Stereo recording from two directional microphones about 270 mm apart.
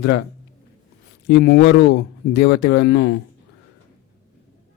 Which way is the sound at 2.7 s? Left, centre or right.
Left.